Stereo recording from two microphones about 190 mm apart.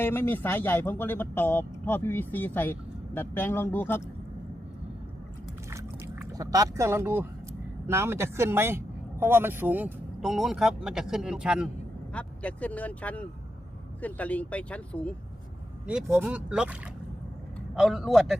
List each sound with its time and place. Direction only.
0.0 s speech: 10° left (ahead or behind)
5.7 s a sound: 15° right (ahead or behind)
7.9 s speech: 15° right (ahead or behind)
12.1 s speech: 5° left (ahead or behind)
15.9 s speech: 10° right (ahead or behind)
17.7 s a man's voice: centre (ahead or behind)